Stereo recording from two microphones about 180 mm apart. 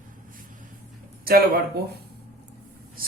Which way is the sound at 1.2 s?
55° right (ahead or behind).